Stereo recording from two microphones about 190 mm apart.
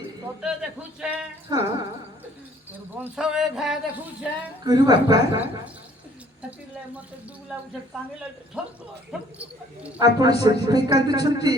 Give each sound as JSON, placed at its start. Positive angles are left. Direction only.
{"t": 0.4, "sound": "speech", "side_deg": -5}
{"t": 1.5, "sound": "speech", "side_deg": -20}
{"t": 3.0, "sound": "speech", "side_deg": -5}
{"t": 4.6, "sound": "speech", "side_deg": -20}
{"t": 8.6, "sound": "speech", "side_deg": -5}
{"t": 10.0, "sound": "speech", "side_deg": -20}